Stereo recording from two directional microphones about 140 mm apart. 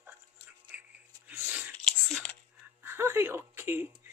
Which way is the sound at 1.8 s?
5° left (ahead or behind).